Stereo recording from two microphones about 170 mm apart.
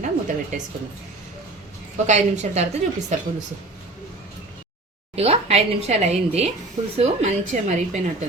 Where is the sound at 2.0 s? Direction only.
45° right (ahead or behind).